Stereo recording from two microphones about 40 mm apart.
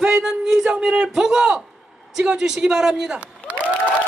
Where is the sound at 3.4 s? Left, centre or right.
Left.